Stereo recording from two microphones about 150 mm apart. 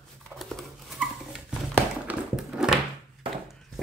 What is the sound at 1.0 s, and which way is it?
Dog, 10° right (ahead or behind).